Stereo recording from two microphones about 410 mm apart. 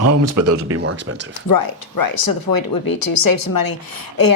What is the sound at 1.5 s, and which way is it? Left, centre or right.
Speech, left.